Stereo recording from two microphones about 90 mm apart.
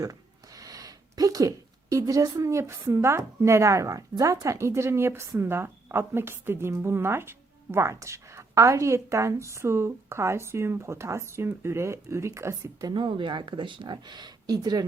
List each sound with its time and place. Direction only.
0.0 s a woman's voice: 40° right (ahead or behind)
12.9 s speech: 60° right (ahead or behind)